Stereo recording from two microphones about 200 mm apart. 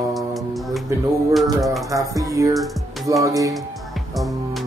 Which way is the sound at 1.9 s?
15° right (ahead or behind).